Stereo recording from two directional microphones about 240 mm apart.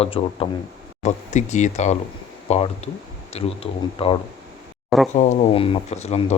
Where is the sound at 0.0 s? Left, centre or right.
Left.